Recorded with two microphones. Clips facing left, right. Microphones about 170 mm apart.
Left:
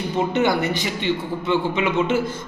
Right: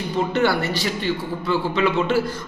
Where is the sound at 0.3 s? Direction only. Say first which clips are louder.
Even; 20° left (ahead or behind).